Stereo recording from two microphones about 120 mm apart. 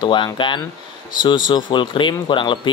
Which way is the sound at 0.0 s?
40° left (ahead or behind).